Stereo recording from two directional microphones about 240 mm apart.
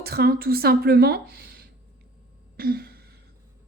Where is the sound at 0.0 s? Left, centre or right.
Right.